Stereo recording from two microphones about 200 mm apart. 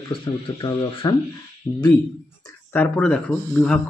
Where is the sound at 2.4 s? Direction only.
10° left (ahead or behind).